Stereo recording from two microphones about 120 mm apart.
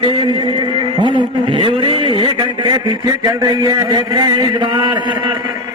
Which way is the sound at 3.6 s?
35° right (ahead or behind).